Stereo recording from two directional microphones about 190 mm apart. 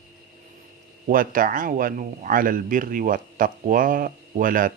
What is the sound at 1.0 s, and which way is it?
Speech, 45° right (ahead or behind).